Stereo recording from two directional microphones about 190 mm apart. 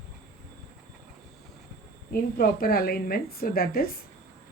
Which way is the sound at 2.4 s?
50° left (ahead or behind).